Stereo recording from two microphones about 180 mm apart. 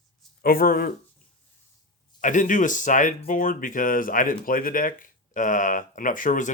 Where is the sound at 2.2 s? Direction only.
45° left (ahead or behind).